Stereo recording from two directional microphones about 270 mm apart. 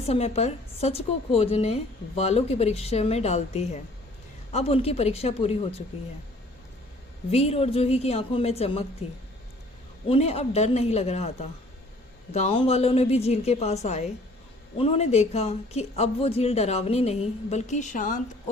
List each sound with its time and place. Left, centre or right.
0.0 s a woman's voice: left
7.3 s a woman's voice: left
10.1 s a woman's voice: left